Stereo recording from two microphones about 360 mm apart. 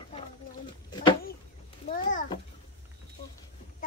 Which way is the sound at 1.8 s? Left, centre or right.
Left.